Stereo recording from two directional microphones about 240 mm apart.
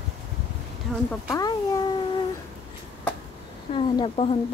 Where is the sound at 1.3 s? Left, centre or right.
Centre.